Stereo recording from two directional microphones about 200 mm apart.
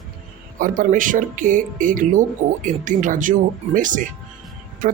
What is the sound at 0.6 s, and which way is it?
A man's voice, 40° right (ahead or behind).